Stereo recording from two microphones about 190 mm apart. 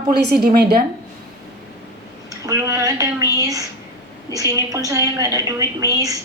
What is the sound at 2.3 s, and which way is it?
A woman's voice, 20° right (ahead or behind).